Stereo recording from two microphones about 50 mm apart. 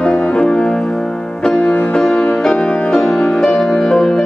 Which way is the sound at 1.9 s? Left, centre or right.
Centre.